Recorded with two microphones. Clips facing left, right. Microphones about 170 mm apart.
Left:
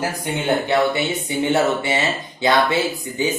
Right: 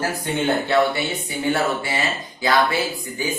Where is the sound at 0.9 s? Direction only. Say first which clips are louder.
Left 4 dB; 20° left (ahead or behind).